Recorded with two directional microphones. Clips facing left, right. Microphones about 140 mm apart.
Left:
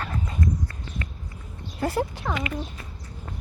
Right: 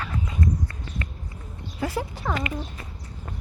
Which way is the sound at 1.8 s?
60° left (ahead or behind).